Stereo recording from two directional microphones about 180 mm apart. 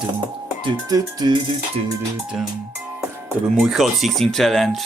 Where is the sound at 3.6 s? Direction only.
Centre (ahead or behind).